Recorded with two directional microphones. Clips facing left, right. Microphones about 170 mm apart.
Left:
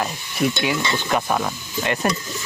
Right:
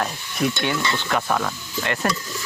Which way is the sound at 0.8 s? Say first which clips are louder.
Left 2 dB; 15° left (ahead or behind).